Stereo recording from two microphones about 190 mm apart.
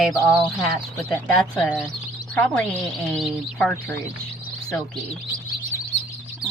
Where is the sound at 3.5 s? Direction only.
10° left (ahead or behind).